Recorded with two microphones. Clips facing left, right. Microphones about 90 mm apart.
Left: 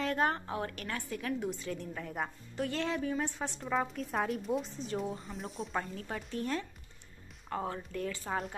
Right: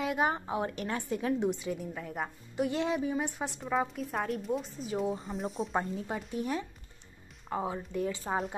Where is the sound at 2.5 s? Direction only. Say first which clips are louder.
Right 4 dB; 15° right (ahead or behind); by 5.7 s centre (ahead or behind).